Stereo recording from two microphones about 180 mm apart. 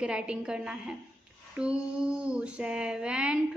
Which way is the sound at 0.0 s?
5° right (ahead or behind).